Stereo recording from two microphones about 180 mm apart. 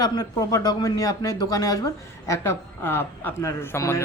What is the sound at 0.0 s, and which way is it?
A man's voice, 20° left (ahead or behind).